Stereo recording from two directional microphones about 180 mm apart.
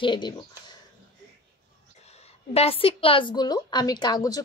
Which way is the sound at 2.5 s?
35° left (ahead or behind).